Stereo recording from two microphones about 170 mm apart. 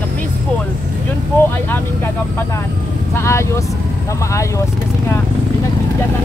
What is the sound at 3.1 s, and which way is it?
Vehicle, 15° left (ahead or behind).